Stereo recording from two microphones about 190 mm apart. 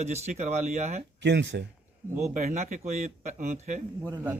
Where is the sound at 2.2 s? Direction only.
35° right (ahead or behind).